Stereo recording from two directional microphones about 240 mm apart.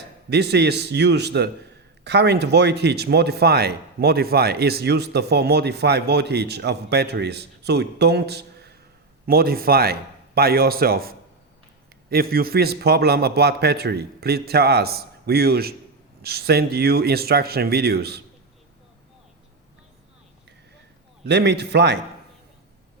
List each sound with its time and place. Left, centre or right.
0.3 s a man's voice: right
21.2 s speech: right